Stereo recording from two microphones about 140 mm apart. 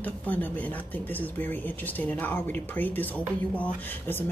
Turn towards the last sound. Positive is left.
turn(degrees=15)  # may be behind; listen again after turning